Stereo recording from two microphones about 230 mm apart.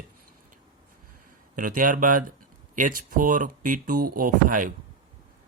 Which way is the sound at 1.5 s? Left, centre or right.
Right.